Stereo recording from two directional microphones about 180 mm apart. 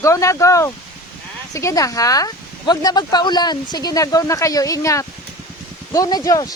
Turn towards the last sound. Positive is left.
turn(degrees=20)  # may be behind; listen again after turning